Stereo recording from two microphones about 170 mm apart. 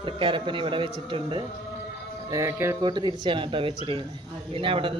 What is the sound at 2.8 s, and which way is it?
A man's voice, 25° right (ahead or behind).